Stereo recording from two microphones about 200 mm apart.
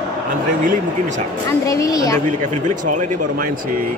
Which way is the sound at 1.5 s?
15° left (ahead or behind).